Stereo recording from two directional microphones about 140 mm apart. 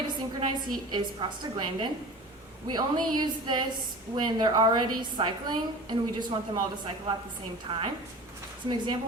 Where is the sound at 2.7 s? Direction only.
30° right (ahead or behind).